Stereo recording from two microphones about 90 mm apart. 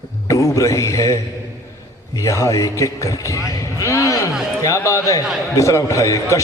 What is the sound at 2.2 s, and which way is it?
A man's voice, 35° left (ahead or behind).